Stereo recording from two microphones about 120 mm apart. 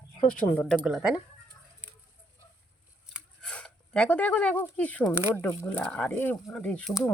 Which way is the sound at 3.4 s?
5° left (ahead or behind).